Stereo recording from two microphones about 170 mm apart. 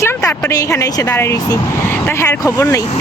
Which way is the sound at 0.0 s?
20° left (ahead or behind).